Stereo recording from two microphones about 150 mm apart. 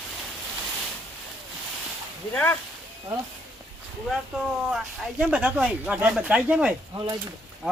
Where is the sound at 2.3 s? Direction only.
10° left (ahead or behind).